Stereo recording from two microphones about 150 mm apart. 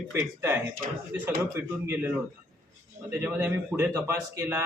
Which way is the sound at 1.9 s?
10° right (ahead or behind).